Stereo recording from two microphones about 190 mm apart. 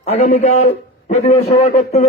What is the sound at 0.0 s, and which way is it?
A man's voice, 35° left (ahead or behind).